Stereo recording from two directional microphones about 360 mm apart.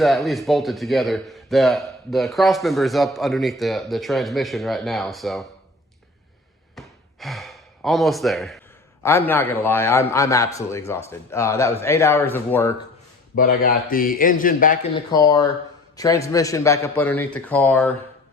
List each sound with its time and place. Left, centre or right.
0.0 s speech: centre
6.7 s gasp: centre
9.0 s a man's voice: centre
13.3 s a man's voice: left
15.1 s a man's voice: centre